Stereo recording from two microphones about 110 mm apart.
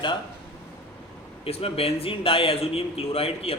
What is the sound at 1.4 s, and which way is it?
Speech, 60° left (ahead or behind).